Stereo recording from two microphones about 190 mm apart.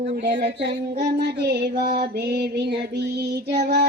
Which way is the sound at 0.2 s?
65° right (ahead or behind).